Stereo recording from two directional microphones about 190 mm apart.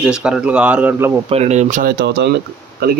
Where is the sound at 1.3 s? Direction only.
35° right (ahead or behind); by 3.0 s 55° right (ahead or behind).